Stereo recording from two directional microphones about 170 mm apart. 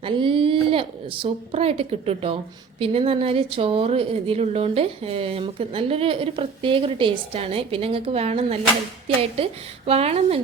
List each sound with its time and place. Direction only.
0.0 s a woman's voice: 30° right (ahead or behind)